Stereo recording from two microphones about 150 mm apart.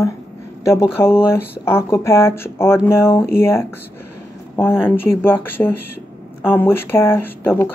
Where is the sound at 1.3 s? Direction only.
15° left (ahead or behind).